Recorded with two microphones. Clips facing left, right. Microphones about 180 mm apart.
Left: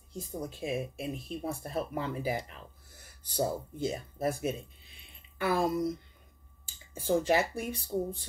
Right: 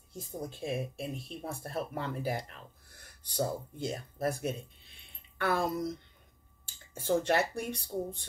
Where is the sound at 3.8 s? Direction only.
Centre (ahead or behind).